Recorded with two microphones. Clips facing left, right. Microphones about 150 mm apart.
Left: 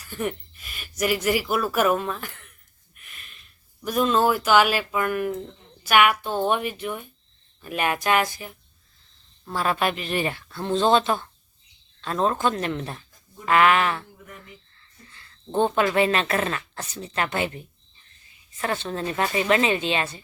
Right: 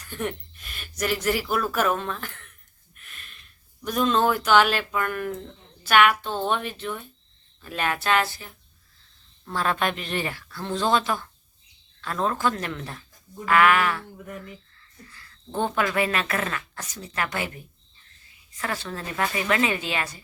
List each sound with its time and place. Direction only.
0.0 s speech: 5° left (ahead or behind)
2.9 s a sound: 5° left (ahead or behind)
3.8 s speech: 5° left (ahead or behind)
10.2 s a woman's voice: 25° left (ahead or behind)
15.1 s a woman's voice: 25° left (ahead or behind)